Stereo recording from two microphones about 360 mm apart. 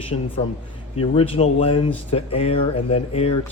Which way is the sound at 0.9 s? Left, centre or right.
Centre.